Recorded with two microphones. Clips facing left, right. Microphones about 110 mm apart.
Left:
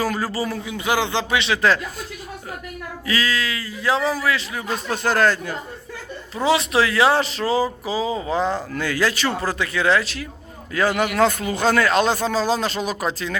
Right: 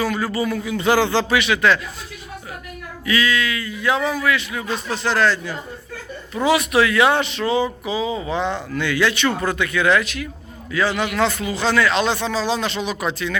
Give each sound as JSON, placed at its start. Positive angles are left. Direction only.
{"t": 0.0, "sound": "speech", "side_deg": 40}
{"t": 0.8, "sound": "speech", "side_deg": 15}
{"t": 3.1, "sound": "speech", "side_deg": 35}
{"t": 4.9, "sound": "speech", "side_deg": 45}
{"t": 6.3, "sound": "speech", "side_deg": 30}
{"t": 10.7, "sound": "speech", "side_deg": 45}